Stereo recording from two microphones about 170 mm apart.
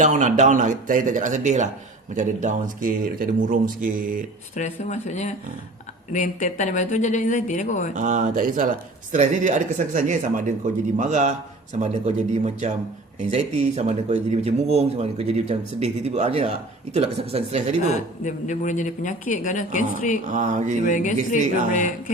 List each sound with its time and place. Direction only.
0.0 s speech: 45° right (ahead or behind)
4.5 s speech: 45° left (ahead or behind)
7.9 s speech: 45° right (ahead or behind)
18.2 s speech: 45° left (ahead or behind)
20.2 s speech: 45° right (ahead or behind)
20.8 s speech: 50° left (ahead or behind)